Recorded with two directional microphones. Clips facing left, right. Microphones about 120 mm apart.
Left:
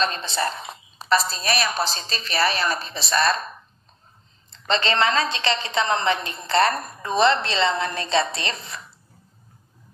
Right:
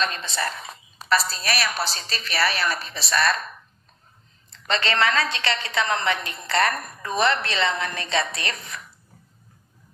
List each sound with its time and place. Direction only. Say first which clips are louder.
0.0 s a woman's voice: left 3 dB; 30° left (ahead or behind)